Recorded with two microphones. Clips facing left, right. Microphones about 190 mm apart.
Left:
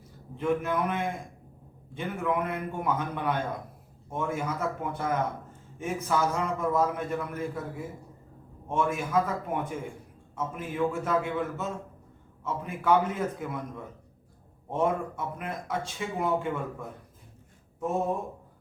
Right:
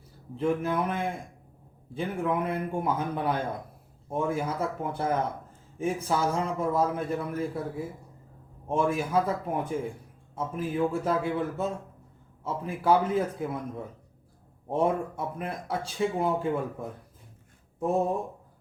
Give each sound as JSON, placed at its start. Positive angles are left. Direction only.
{"t": 0.3, "sound": "a man's voice", "side_deg": -30}